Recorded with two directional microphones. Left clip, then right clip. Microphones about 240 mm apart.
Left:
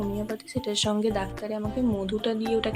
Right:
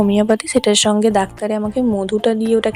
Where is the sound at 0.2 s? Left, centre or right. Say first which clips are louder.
Right 18 dB; right.